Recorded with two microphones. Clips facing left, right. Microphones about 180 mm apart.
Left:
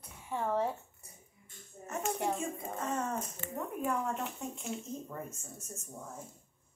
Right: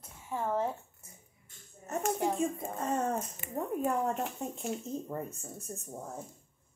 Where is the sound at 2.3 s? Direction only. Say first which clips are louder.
Right 5 dB; 35° right (ahead or behind).